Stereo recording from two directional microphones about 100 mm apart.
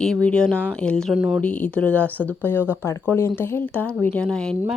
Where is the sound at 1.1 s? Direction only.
10° right (ahead or behind).